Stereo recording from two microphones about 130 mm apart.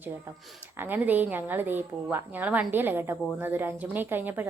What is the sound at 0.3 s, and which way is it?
A woman's voice, 15° right (ahead or behind).